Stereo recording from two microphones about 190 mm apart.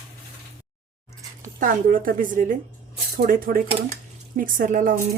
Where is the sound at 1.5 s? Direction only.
45° right (ahead or behind).